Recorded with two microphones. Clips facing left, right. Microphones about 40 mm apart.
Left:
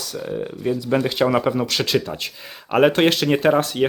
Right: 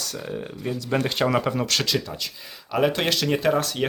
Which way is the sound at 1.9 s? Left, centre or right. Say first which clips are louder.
Left 6 dB; left.